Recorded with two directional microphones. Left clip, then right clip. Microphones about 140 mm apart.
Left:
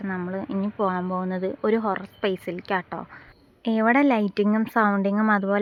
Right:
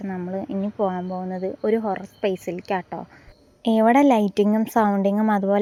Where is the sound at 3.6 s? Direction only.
40° right (ahead or behind).